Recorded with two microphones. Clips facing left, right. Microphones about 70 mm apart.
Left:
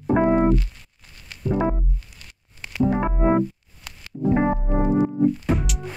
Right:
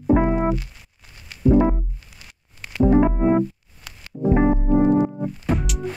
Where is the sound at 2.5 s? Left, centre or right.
Centre.